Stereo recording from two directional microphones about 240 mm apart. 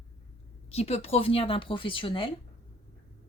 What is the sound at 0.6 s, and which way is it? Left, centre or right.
A woman's voice, left.